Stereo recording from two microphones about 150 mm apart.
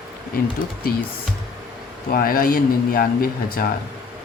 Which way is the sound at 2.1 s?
75° left (ahead or behind).